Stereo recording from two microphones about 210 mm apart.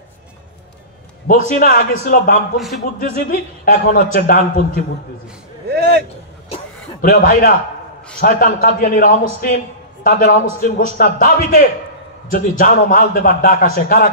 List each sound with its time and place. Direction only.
1.5 s a man's voice: 45° left (ahead or behind)
2.5 s a man's voice: centre (ahead or behind)
3.2 s a man's voice: 45° left (ahead or behind)
5.7 s a man's voice: 50° right (ahead or behind)
7.0 s a man's voice: 40° left (ahead or behind)